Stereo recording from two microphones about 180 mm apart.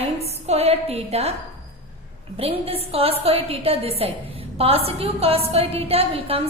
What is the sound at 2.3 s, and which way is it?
A woman's voice, 30° right (ahead or behind).